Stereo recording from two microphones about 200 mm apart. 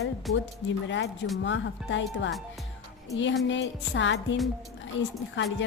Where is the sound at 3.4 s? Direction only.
65° left (ahead or behind).